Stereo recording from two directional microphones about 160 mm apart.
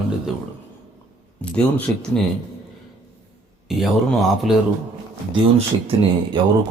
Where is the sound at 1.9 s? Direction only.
10° left (ahead or behind).